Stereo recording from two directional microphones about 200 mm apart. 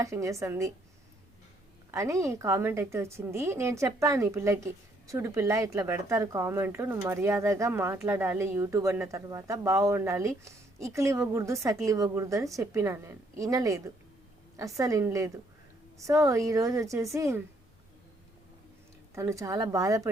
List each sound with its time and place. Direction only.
0.0 s a woman's voice: 15° right (ahead or behind)
1.9 s a woman's voice: 15° right (ahead or behind)
19.1 s a woman's voice: 15° right (ahead or behind)